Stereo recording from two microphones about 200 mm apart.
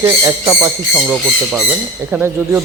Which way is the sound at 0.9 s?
Centre (ahead or behind).